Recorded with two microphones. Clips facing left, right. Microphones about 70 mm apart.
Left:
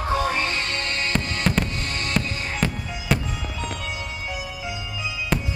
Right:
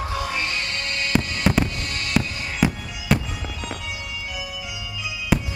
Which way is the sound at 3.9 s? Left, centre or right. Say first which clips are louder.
Left 2 dB; left.